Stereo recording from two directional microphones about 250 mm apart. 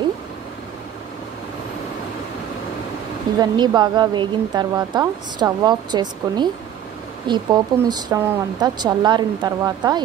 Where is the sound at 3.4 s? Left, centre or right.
Centre.